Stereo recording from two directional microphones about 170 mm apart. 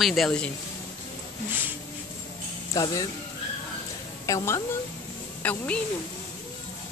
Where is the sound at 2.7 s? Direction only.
20° left (ahead or behind).